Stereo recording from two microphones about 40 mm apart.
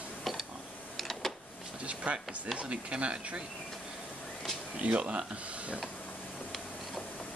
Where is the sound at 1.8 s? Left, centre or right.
Right.